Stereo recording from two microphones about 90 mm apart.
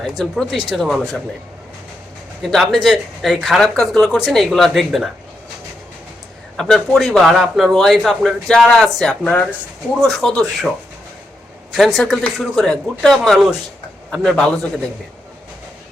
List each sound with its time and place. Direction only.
0.0 s speech: centre (ahead or behind)
2.4 s a man's voice: 5° left (ahead or behind)
6.6 s speech: 5° left (ahead or behind)
10.0 s speech: 5° left (ahead or behind)
11.7 s speech: centre (ahead or behind)